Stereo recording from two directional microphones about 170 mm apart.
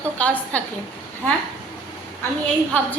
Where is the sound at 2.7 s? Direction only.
10° left (ahead or behind).